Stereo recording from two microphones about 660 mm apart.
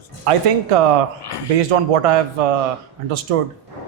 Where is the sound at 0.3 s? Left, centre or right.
Right.